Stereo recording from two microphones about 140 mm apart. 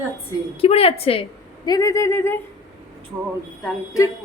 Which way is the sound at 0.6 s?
45° left (ahead or behind).